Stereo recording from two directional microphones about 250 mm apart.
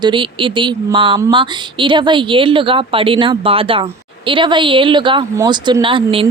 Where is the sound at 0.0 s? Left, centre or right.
Centre.